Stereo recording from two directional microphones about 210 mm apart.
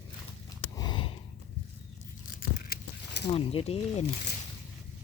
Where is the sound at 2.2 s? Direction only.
40° left (ahead or behind).